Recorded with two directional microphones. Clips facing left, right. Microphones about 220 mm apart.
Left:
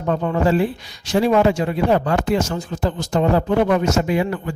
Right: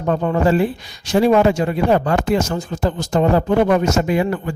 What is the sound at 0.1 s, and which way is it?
Speech, 45° right (ahead or behind).